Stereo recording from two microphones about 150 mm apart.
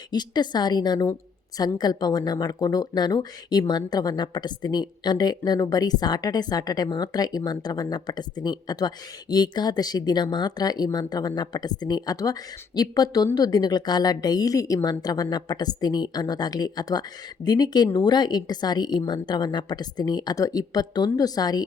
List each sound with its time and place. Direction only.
0.1 s speech: 30° left (ahead or behind)